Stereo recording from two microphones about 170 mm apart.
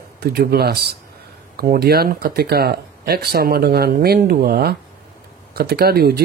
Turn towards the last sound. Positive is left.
turn(degrees=-65)  # may be behind; listen again after turning